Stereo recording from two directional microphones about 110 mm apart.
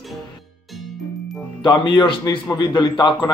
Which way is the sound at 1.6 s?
45° left (ahead or behind).